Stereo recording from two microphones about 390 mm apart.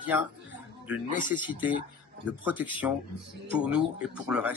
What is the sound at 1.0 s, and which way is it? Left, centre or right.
Speech, centre.